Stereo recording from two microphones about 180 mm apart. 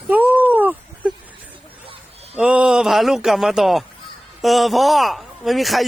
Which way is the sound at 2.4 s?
5° right (ahead or behind).